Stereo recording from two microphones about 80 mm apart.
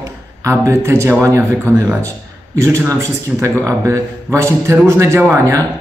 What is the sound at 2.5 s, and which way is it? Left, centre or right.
Speech, right.